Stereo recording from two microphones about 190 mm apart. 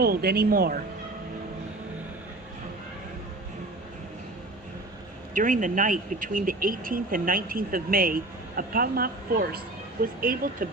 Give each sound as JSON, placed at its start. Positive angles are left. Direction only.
{"t": 0.0, "sound": "speech", "side_deg": -55}
{"t": 5.3, "sound": "speech", "side_deg": -45}